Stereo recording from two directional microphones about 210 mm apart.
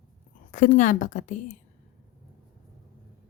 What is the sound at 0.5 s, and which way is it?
Speech, 40° left (ahead or behind).